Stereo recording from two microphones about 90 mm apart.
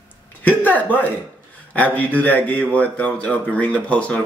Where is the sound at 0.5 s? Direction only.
20° left (ahead or behind).